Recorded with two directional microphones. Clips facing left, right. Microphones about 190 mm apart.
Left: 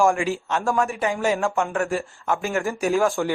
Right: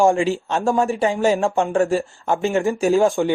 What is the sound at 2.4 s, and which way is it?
Speech, 20° right (ahead or behind).